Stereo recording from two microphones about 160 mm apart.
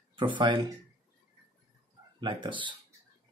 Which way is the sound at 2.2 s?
30° right (ahead or behind).